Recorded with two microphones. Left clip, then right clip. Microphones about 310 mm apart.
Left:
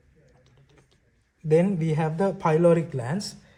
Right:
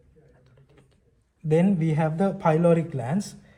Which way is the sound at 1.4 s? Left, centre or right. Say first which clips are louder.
Left 1 dB; left.